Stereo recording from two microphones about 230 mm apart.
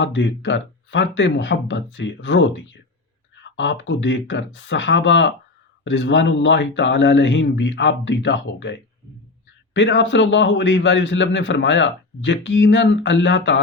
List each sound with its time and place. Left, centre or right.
0.0 s a man's voice: left
9.7 s a man's voice: left